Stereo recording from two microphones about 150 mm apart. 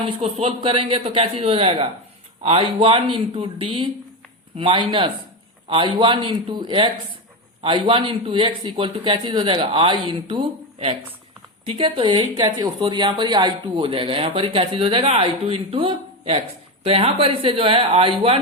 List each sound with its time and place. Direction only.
0.0 s speech: 40° right (ahead or behind)